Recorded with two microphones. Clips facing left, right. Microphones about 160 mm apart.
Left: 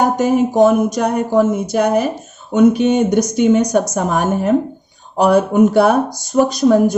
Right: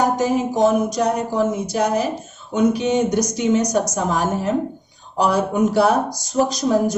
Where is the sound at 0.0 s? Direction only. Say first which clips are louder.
Left 4 dB; 55° left (ahead or behind).